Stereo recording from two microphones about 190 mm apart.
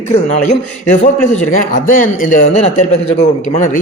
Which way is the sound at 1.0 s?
40° left (ahead or behind).